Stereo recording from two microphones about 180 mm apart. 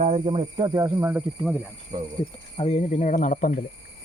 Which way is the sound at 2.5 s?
35° left (ahead or behind).